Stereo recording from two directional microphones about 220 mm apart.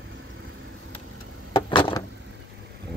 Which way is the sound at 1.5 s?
20° left (ahead or behind).